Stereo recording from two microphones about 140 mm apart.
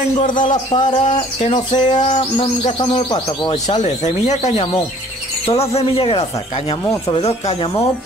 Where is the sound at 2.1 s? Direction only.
45° left (ahead or behind).